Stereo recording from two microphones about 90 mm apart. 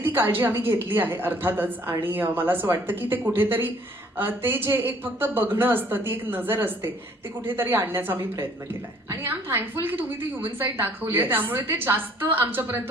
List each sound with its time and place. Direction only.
0.2 s a woman's voice: 25° right (ahead or behind)